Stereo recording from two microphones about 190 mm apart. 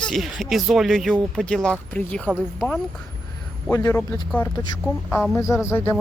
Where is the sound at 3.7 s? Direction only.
15° left (ahead or behind).